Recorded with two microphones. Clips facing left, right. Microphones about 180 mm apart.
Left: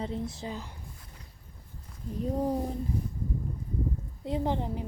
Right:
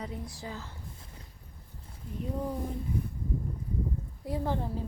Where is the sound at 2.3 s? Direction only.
40° left (ahead or behind).